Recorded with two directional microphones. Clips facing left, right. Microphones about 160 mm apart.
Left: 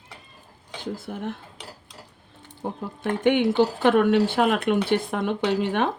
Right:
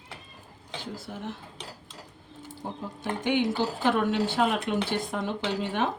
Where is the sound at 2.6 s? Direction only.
60° left (ahead or behind).